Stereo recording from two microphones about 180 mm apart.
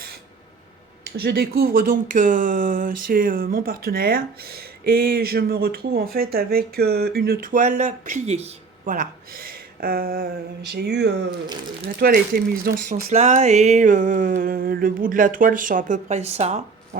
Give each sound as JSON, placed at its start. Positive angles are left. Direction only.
{"t": 1.2, "sound": "speech", "side_deg": -60}
{"t": 10.7, "sound": "speech", "side_deg": -65}
{"t": 11.9, "sound": "speech", "side_deg": -55}
{"t": 12.9, "sound": "a sound", "side_deg": -40}